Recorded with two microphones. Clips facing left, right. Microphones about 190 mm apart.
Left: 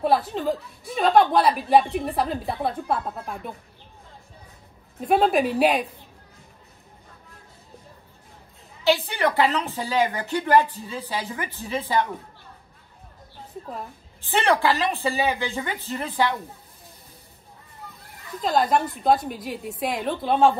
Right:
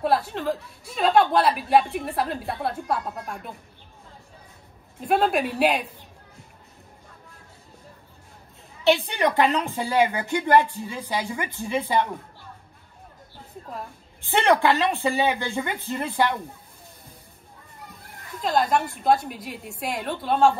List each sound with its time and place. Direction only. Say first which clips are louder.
0.0 s a woman's voice: left 1 dB; centre (ahead or behind)
5.0 s a woman's voice: left 2 dB; centre (ahead or behind)
8.8 s a woman's voice: right 1 dB; 15° right (ahead or behind)
14.2 s a woman's voice: right 1 dB; 15° right (ahead or behind)
18.4 s a woman's voice: left 1 dB; centre (ahead or behind)